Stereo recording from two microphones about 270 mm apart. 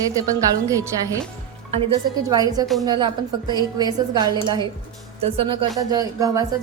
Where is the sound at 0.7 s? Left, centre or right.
Centre.